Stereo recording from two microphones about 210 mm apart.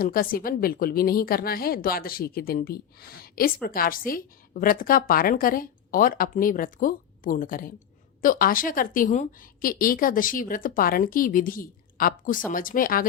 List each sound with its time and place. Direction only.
0.0 s a woman's voice: 45° left (ahead or behind)